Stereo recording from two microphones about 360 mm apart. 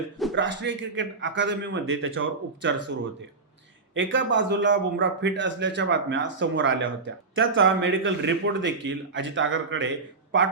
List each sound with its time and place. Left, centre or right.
0.3 s a man's voice: right
3.9 s a man's voice: right